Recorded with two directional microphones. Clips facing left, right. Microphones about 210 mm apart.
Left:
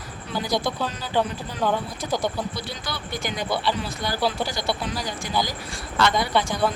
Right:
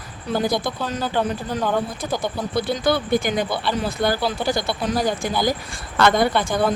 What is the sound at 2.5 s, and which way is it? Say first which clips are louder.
Speech: right 12 dB; 55° right (ahead or behind).